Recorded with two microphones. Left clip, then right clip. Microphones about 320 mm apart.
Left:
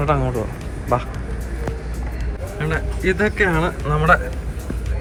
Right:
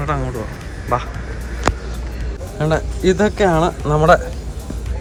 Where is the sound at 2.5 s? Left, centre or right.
Centre.